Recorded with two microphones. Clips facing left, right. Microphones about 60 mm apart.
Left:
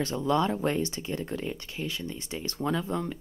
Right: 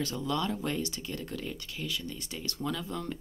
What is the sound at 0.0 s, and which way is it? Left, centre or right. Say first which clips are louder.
Speech: left 6 dB; left.